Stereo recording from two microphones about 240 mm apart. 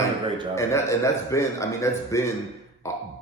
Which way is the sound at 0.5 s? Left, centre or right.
Centre.